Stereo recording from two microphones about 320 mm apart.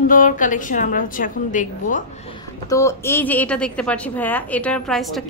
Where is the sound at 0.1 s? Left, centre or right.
Left.